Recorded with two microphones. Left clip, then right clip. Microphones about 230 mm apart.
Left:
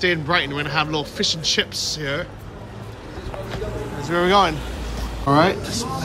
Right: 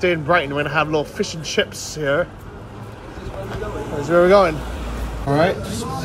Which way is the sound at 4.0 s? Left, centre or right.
Centre.